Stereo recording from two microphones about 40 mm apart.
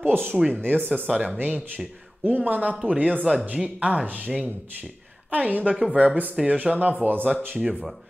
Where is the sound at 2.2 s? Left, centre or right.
Right.